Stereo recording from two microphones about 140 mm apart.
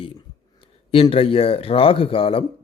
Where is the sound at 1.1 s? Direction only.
40° left (ahead or behind).